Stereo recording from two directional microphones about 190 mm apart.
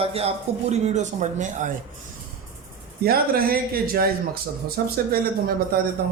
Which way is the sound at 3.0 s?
50° right (ahead or behind).